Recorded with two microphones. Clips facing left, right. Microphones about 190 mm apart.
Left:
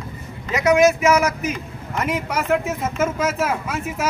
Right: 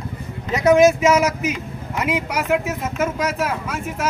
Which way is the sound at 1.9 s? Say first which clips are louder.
Right 1 dB; 10° right (ahead or behind).